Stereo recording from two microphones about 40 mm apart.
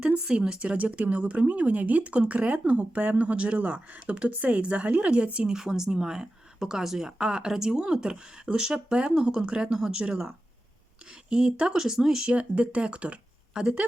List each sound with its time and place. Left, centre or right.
0.0 s speech: right
5.5 s speech: centre
11.3 s speech: centre
11.8 s speech: centre
12.2 s speech: right